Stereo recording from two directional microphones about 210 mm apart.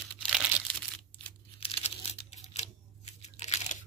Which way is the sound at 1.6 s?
30° left (ahead or behind).